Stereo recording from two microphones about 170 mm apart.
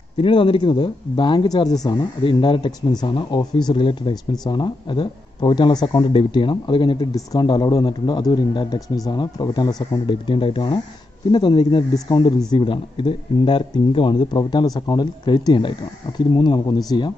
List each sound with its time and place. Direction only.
0.2 s speech: 30° left (ahead or behind)